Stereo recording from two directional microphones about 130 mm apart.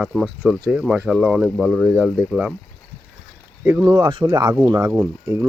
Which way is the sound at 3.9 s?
35° right (ahead or behind).